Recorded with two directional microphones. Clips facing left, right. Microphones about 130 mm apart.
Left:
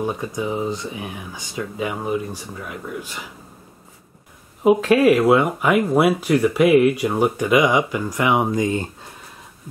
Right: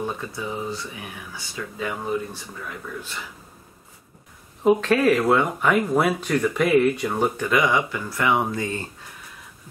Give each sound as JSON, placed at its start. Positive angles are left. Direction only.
{"t": 0.0, "sound": "speech", "side_deg": 15}
{"t": 4.6, "sound": "speech", "side_deg": 10}